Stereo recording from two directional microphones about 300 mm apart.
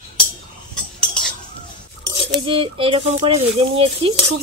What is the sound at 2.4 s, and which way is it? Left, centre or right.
Speech, centre.